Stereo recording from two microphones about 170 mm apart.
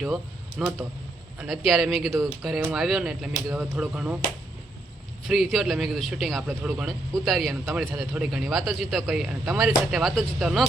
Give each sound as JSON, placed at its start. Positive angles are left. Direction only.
{"t": 0.6, "sound": "speech", "side_deg": -5}
{"t": 5.3, "sound": "speech", "side_deg": 0}